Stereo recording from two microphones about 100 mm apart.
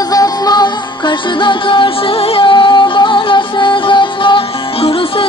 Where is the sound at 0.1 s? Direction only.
40° left (ahead or behind).